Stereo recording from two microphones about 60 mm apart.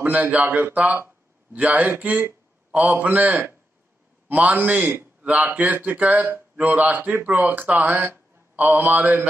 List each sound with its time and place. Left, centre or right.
0.0 s speech: right